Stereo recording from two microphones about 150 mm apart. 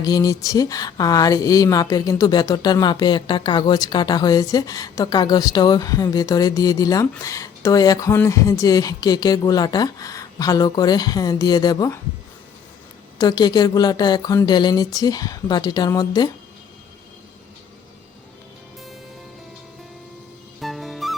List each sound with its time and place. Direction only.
0.0 s speech: 25° left (ahead or behind)
13.1 s speech: 25° left (ahead or behind)
20.6 s music: centre (ahead or behind)